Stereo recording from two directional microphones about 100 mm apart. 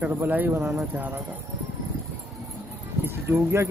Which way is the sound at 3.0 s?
25° right (ahead or behind).